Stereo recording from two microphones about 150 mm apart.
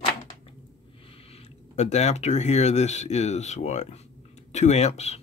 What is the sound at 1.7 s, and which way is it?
Speech, 50° left (ahead or behind).